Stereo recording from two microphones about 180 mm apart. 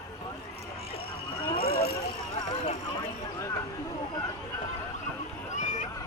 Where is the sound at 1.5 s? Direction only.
60° left (ahead or behind).